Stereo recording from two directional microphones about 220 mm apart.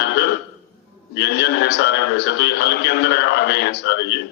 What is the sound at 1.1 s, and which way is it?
A man's voice, 50° left (ahead or behind).